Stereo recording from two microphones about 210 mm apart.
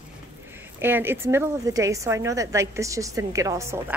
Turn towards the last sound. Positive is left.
turn(degrees=-15)  # may be behind; listen again after turning